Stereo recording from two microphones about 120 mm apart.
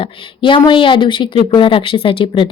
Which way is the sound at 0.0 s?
45° left (ahead or behind).